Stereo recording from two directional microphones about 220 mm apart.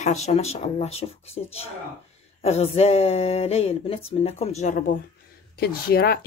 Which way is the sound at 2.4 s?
30° left (ahead or behind).